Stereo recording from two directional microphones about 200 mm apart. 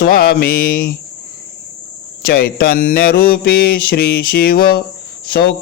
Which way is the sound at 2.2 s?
50° left (ahead or behind).